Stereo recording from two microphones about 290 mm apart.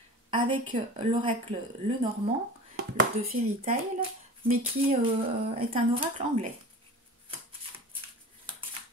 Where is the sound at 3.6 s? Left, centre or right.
Right.